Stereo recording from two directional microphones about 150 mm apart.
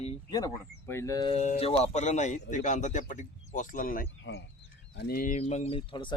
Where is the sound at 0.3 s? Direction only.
25° left (ahead or behind).